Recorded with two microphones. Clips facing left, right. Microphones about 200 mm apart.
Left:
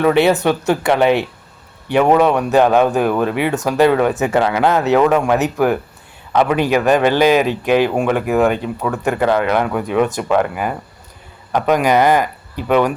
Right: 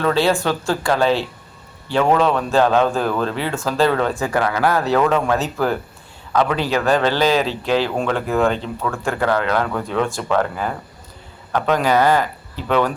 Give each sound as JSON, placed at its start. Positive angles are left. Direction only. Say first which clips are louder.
{"t": 0.0, "sound": "speech", "louder": "left 5 dB", "side_deg": 20}